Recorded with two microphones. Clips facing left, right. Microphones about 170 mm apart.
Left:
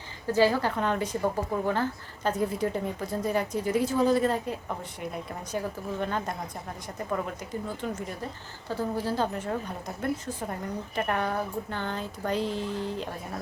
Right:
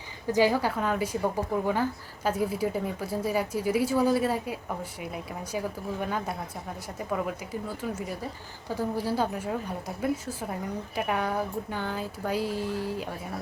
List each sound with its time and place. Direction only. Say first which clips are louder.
0.3 s a woman's voice: even; 15° right (ahead or behind)